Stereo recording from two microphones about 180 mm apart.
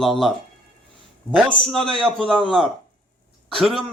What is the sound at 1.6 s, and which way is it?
Speech, centre (ahead or behind).